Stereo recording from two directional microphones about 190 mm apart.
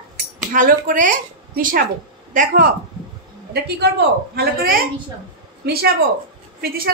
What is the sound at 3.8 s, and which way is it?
Speech, 65° right (ahead or behind).